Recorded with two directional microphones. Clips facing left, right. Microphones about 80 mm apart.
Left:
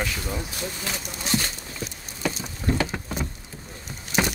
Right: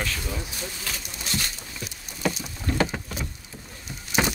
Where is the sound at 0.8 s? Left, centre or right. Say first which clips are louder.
Left 3 dB; left.